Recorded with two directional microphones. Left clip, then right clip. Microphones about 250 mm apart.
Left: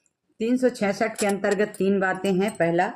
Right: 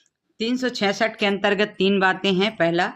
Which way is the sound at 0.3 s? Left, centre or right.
Right.